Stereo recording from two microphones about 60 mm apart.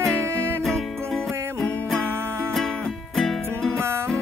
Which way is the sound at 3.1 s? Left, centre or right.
Centre.